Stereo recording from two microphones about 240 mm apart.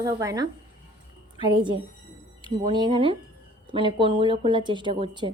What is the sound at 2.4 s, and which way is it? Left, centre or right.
A woman's voice, centre.